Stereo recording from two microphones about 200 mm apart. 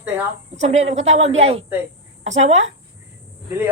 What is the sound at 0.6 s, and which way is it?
Speech, 35° right (ahead or behind).